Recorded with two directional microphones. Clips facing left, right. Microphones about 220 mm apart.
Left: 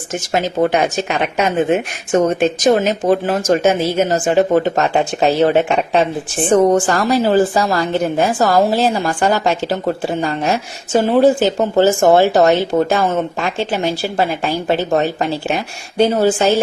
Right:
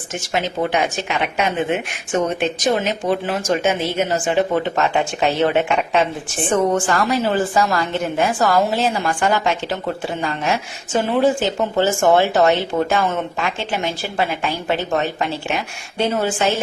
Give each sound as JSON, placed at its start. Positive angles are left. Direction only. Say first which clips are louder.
{"t": 0.3, "sound": "a woman's voice", "louder": "left 5 dB", "side_deg": 40}